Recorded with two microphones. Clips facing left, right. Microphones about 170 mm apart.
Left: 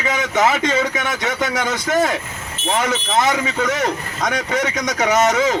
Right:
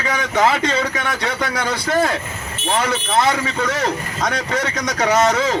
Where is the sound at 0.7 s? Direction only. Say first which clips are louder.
Left 1 dB; 20° left (ahead or behind).